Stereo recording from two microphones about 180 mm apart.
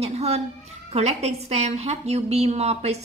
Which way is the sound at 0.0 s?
35° right (ahead or behind).